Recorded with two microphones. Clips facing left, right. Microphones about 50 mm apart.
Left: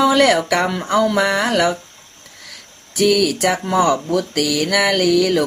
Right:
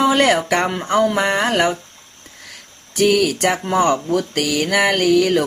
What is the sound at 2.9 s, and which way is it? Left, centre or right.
Speech, right.